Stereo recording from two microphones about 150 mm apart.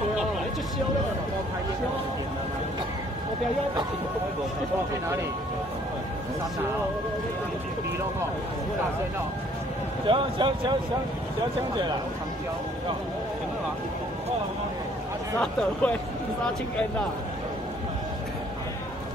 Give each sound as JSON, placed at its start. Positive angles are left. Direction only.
{"t": 10.0, "sound": "speech", "side_deg": -35}
{"t": 15.4, "sound": "speech", "side_deg": 10}